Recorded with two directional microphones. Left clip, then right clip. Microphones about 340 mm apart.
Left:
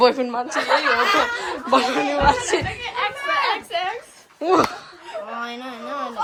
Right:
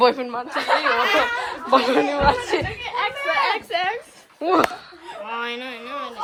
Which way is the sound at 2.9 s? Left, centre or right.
Centre.